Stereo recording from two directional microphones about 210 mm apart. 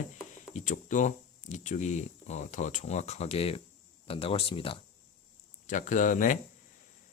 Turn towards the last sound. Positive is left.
turn(degrees=40)  # may be behind; listen again after turning